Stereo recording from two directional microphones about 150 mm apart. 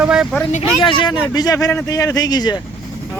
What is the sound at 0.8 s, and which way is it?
Speech, 35° left (ahead or behind).